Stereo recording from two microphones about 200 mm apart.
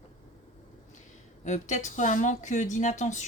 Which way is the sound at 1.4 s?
35° left (ahead or behind).